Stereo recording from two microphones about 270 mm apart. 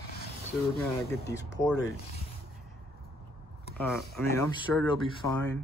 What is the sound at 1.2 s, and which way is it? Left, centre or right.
Speech, centre.